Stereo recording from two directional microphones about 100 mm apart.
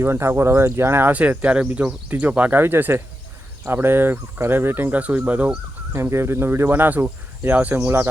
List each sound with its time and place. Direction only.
0.0 s speech: 25° right (ahead or behind)